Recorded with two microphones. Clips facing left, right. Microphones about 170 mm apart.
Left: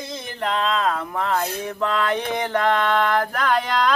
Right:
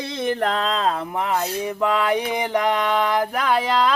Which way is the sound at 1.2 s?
15° right (ahead or behind).